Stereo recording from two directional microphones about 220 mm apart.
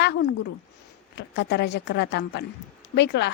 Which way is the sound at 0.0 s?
50° left (ahead or behind).